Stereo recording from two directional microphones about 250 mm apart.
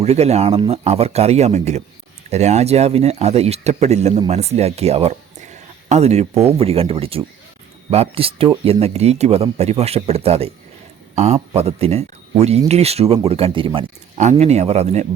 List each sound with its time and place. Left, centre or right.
0.0 s speech: right